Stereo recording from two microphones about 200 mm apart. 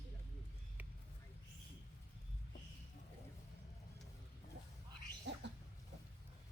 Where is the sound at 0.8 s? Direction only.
10° right (ahead or behind).